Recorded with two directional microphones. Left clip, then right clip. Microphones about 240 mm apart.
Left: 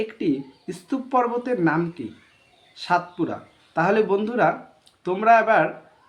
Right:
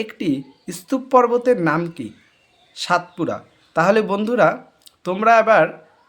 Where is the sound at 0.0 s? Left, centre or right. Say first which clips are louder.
Right 1 dB; right.